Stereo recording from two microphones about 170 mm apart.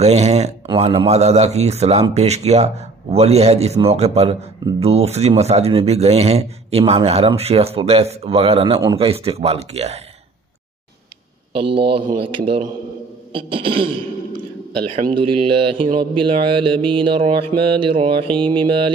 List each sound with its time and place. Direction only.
0.0 s speech: 40° right (ahead or behind)
11.6 s speech: 30° right (ahead or behind)
13.3 s speech: 30° right (ahead or behind)
15.1 s speech: 30° right (ahead or behind)